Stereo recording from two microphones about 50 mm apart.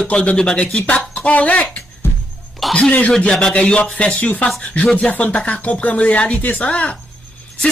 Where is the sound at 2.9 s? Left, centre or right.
Left.